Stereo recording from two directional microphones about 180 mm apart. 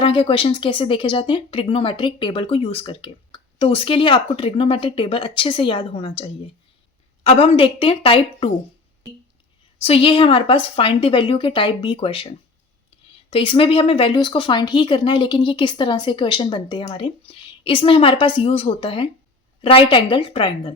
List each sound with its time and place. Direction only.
0.0 s a woman's voice: 30° left (ahead or behind)
9.8 s speech: 30° left (ahead or behind)
13.3 s speech: 30° left (ahead or behind)